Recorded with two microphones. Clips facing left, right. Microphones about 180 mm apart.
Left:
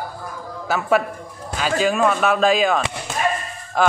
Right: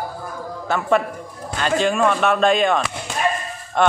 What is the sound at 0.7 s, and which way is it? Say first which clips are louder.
A man's voice: even; 5° left (ahead or behind).